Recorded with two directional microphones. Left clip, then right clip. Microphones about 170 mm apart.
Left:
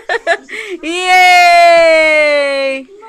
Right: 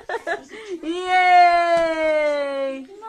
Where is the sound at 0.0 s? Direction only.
20° left (ahead or behind).